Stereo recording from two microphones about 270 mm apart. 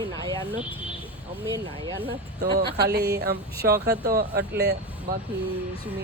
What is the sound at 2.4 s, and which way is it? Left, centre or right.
Speech, right.